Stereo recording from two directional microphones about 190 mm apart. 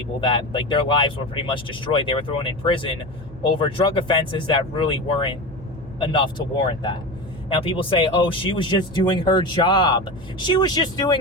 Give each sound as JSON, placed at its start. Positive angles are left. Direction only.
{"t": 0.2, "sound": "speech", "side_deg": 25}